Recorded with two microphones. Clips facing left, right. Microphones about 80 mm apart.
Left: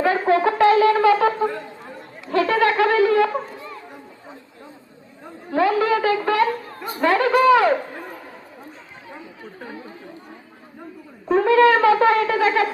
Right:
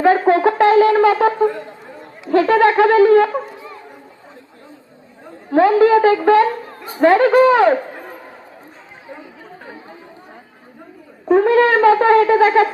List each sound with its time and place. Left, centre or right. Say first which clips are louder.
0.3 s a sound: right 3 dB; right
2.2 s a woman's voice: right 6 dB; right
5.5 s a woman's voice: right 7 dB; right
11.3 s a woman's voice: right 2 dB; right